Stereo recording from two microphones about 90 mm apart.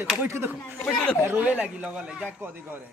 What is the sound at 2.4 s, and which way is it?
Speech, 20° right (ahead or behind).